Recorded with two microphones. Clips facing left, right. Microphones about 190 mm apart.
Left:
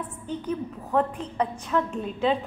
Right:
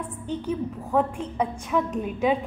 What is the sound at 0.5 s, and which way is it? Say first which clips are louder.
A woman's voice: right 1 dB; 5° right (ahead or behind).